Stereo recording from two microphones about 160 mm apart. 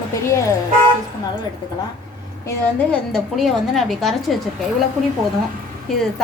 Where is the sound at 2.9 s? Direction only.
Centre (ahead or behind).